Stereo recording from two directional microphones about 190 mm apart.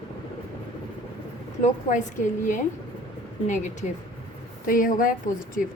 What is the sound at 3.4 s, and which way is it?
A woman's voice, 40° left (ahead or behind).